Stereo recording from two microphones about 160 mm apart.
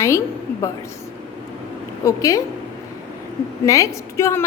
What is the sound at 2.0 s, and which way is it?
Speech, 20° left (ahead or behind).